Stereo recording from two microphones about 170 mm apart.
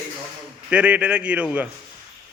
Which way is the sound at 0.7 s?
10° right (ahead or behind).